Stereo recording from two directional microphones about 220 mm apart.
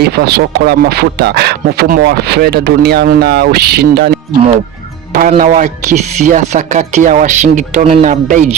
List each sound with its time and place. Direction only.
0.0 s a man's voice: 45° right (ahead or behind)
5.3 s speech: 35° right (ahead or behind)